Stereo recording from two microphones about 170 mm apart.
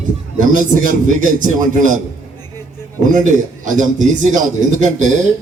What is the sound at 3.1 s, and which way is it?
A man's voice, 50° right (ahead or behind).